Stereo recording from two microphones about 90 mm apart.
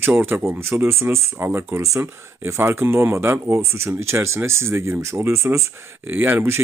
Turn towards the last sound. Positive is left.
turn(degrees=-25)  # may be behind; listen again after turning